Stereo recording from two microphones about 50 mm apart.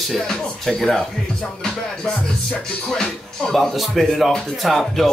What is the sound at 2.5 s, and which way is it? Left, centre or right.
Speech, centre.